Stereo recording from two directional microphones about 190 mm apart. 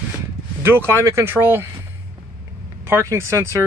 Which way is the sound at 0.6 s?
10° right (ahead or behind).